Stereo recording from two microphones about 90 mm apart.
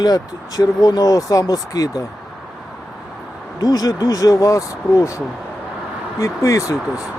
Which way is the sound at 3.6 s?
45° left (ahead or behind).